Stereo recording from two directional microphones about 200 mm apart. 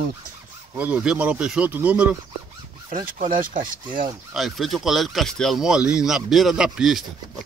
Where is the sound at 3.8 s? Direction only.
25° right (ahead or behind).